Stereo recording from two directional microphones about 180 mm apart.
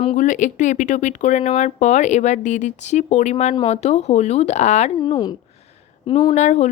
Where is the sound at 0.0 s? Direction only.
40° left (ahead or behind).